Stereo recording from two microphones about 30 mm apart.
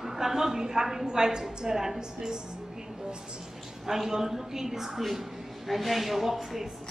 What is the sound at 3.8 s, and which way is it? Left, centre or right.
A woman's voice, centre.